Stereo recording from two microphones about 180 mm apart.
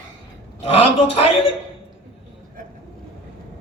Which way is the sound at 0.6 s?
35° left (ahead or behind).